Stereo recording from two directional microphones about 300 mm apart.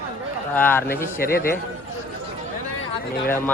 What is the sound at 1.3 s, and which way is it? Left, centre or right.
Speech, left.